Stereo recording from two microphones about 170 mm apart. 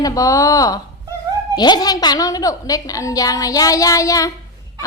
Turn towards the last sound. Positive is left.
turn(degrees=20)  # may be behind; listen again after turning